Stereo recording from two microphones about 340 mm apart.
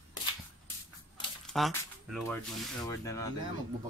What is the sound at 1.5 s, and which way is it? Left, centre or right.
Speech, centre.